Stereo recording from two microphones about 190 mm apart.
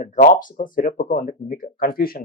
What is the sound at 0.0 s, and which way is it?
Speech, 45° left (ahead or behind).